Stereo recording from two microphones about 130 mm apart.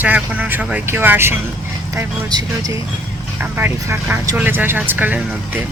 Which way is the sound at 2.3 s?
30° right (ahead or behind).